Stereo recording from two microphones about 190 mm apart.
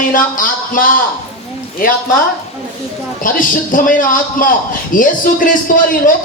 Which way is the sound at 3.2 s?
45° left (ahead or behind).